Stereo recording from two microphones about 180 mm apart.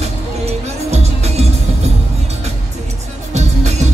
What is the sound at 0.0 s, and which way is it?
Music, 35° right (ahead or behind).